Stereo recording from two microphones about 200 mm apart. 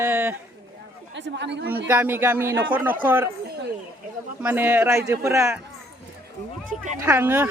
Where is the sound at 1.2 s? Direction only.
60° right (ahead or behind).